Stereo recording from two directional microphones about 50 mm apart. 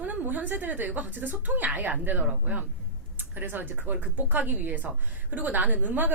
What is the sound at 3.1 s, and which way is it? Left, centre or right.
Speech, right.